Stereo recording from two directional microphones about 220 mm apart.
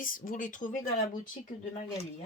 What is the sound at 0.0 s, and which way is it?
Speech, 35° left (ahead or behind).